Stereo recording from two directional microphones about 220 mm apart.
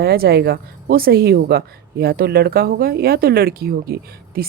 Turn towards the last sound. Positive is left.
turn(degrees=-45)  # may be behind; listen again after turning